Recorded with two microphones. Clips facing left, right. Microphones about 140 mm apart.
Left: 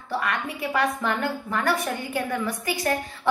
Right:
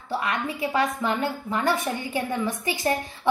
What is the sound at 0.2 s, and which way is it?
A woman's voice, 25° right (ahead or behind).